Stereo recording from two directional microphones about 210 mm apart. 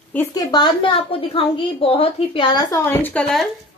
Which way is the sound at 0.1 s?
15° left (ahead or behind).